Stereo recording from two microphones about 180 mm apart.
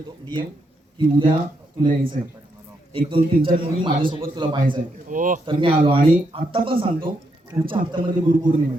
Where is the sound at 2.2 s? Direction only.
50° right (ahead or behind).